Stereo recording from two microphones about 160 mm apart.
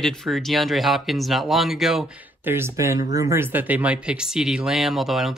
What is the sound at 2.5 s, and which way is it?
Speech, 15° right (ahead or behind).